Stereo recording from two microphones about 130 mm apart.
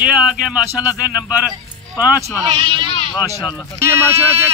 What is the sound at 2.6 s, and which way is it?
Speech, 40° right (ahead or behind).